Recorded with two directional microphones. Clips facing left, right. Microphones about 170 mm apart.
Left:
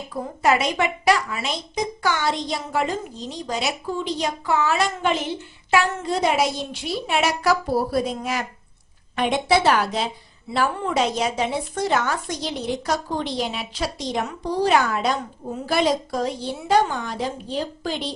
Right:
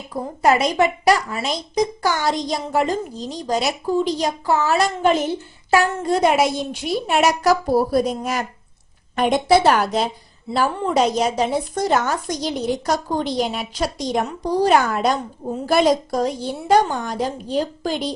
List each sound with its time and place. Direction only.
0.4 s a child's voice: 40° right (ahead or behind)
5.7 s a woman's voice: 50° right (ahead or behind)